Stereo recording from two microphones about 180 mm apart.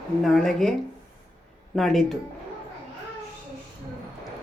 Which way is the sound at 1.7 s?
Centre (ahead or behind).